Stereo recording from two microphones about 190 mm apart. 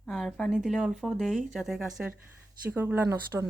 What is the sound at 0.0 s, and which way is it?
Speech, centre (ahead or behind).